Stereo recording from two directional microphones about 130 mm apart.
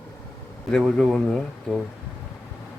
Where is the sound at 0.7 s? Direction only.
5° left (ahead or behind).